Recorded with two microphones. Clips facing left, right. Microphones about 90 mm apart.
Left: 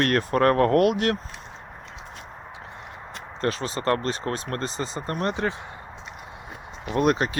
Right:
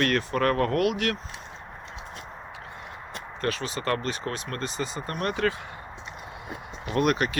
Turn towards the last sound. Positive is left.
turn(degrees=30)  # may be behind; listen again after turning